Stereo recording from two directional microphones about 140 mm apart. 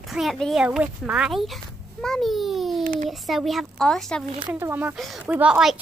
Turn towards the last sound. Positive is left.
turn(degrees=-5)  # may be behind; listen again after turning